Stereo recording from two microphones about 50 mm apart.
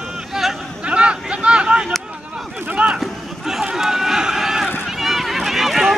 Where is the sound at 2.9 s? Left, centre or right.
Centre.